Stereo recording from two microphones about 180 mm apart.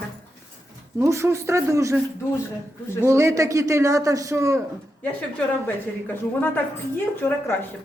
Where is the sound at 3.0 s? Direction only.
15° right (ahead or behind).